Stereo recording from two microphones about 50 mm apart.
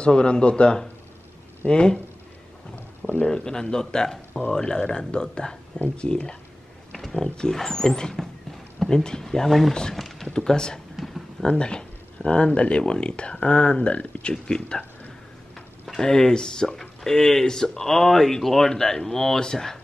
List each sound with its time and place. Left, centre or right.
0.0 s speech: centre
2.7 s a sound: left
3.3 s speech: centre
6.9 s a sound: centre
7.5 s speech: centre
9.9 s a sound: centre
10.2 s speech: centre
14.3 s speech: centre
16.0 s speech: centre